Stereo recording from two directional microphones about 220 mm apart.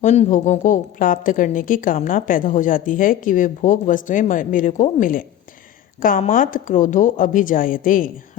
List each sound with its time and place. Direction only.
0.0 s a woman's voice: 35° left (ahead or behind)